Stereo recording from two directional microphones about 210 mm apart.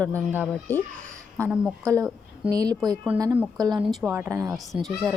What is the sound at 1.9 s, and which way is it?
Speech, 15° right (ahead or behind).